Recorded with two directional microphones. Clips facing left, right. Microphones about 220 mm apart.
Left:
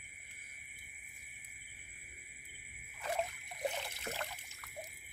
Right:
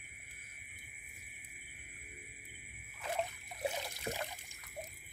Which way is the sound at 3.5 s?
10° right (ahead or behind).